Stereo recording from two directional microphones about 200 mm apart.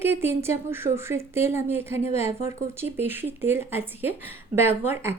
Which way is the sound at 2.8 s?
10° right (ahead or behind).